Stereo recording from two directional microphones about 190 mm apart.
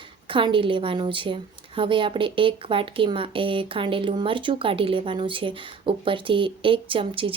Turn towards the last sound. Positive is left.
turn(degrees=-25)  # may be behind; listen again after turning